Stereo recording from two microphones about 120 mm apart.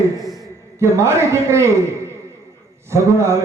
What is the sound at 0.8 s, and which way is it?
A man's voice, 25° right (ahead or behind).